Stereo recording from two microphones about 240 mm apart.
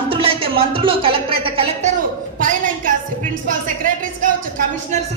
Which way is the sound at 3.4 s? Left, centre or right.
Right.